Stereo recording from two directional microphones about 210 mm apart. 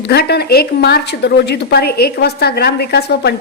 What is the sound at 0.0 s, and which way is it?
A woman's voice, 50° left (ahead or behind).